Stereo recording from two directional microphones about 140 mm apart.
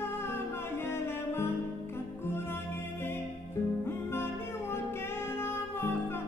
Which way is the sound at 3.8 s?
15° left (ahead or behind).